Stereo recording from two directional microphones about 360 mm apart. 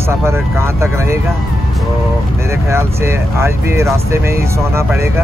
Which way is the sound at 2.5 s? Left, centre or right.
Centre.